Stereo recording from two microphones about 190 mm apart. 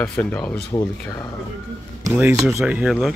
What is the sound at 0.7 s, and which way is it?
Speech, 20° left (ahead or behind).